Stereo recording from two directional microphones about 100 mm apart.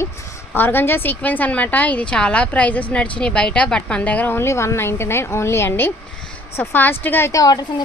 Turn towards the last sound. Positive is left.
turn(degrees=40)  # may be behind; listen again after turning